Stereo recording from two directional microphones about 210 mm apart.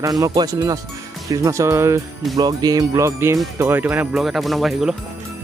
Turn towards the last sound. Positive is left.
turn(degrees=0)  # may be behind; listen again after turning